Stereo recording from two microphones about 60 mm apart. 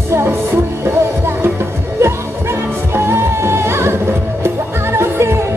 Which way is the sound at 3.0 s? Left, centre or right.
Right.